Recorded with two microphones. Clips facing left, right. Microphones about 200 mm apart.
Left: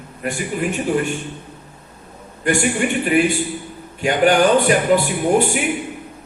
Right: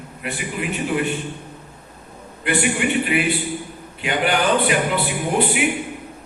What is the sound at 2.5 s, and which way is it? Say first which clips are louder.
Speech: left 2 dB; 45° left (ahead or behind).